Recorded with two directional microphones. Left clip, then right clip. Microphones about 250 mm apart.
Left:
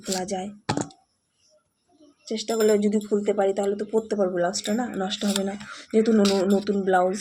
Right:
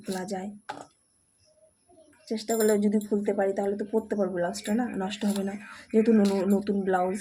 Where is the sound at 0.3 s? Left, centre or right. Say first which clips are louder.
Left 5 dB; centre.